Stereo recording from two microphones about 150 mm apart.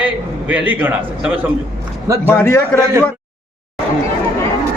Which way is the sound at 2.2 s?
15° left (ahead or behind).